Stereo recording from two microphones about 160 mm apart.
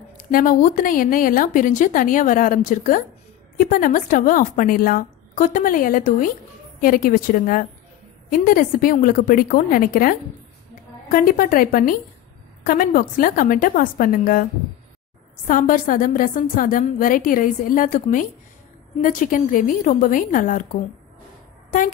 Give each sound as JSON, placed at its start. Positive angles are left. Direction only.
{"t": 0.3, "sound": "a woman's voice", "side_deg": 60}
{"t": 15.4, "sound": "a woman's voice", "side_deg": 55}